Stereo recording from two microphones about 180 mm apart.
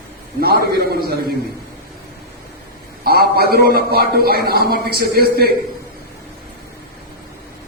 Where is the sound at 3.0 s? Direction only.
60° right (ahead or behind).